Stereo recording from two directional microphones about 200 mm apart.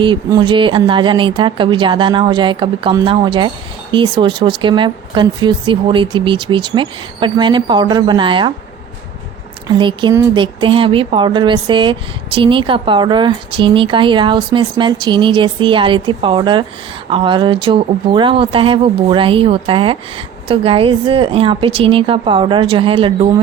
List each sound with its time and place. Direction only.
0.0 s speech: 25° right (ahead or behind)
9.6 s speech: 25° right (ahead or behind)